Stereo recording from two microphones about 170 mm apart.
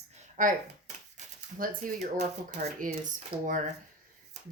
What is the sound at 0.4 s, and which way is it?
Speech, 50° right (ahead or behind).